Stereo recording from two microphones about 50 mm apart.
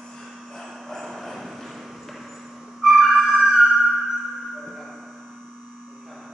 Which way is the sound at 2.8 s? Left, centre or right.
Centre.